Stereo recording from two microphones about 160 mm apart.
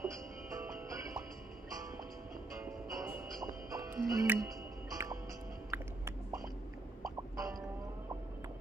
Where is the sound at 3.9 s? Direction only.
10° right (ahead or behind).